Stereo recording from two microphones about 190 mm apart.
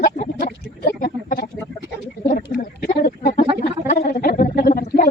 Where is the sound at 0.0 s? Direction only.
50° left (ahead or behind).